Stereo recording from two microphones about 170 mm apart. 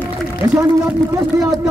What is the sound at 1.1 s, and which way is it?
Speech, 20° right (ahead or behind).